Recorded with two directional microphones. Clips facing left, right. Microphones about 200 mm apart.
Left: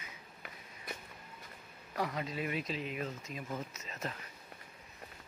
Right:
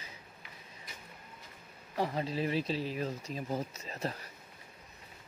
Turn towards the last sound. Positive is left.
turn(degrees=-35)  # may be behind; listen again after turning